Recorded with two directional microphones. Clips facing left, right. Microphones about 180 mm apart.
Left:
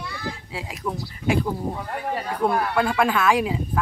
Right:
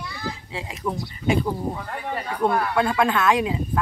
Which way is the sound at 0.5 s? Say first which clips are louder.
Right 2 dB; centre (ahead or behind).